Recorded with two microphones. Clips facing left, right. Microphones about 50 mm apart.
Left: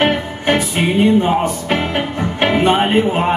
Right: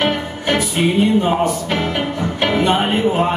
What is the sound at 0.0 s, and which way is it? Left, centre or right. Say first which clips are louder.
Music: left 3 dB; left.